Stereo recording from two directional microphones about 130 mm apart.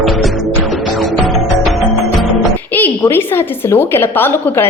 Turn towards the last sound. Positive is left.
turn(degrees=15)  # may be behind; listen again after turning